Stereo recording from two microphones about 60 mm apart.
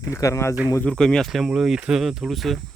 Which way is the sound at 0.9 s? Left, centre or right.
Centre.